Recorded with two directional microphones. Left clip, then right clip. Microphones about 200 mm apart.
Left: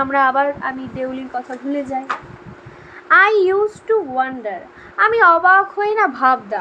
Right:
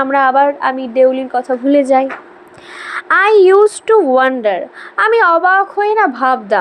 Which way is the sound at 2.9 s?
35° right (ahead or behind).